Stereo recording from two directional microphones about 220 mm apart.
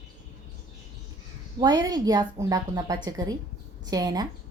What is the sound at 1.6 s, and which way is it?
A woman's voice, 20° right (ahead or behind).